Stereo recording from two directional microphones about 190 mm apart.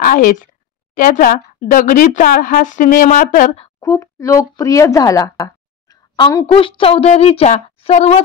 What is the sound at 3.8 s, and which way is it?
Speech, 15° left (ahead or behind).